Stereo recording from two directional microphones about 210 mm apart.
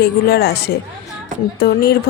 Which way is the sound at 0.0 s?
50° left (ahead or behind).